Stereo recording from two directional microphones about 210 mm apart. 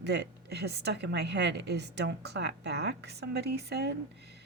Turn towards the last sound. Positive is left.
turn(degrees=-50)  # may be behind; listen again after turning